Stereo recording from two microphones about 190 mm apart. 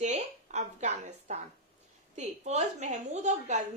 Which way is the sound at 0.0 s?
40° right (ahead or behind).